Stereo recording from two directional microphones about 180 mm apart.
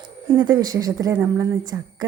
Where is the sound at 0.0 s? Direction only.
25° right (ahead or behind).